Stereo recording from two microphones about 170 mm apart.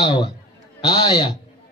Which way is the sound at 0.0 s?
25° left (ahead or behind).